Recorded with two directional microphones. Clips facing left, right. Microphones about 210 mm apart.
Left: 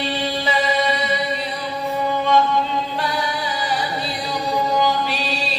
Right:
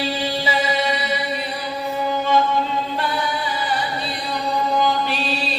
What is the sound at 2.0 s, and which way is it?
Music, 5° right (ahead or behind).